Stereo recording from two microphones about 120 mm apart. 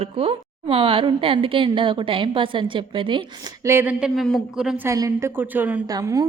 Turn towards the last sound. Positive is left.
turn(degrees=-30)  # may be behind; listen again after turning